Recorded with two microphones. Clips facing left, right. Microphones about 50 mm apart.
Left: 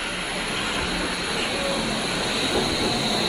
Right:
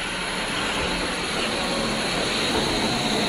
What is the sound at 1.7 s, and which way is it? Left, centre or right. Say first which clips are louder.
Vehicle: right 1 dB; right.